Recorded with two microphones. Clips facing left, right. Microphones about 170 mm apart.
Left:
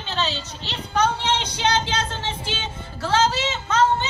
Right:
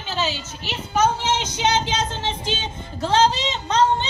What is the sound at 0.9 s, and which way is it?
Speech, 10° right (ahead or behind).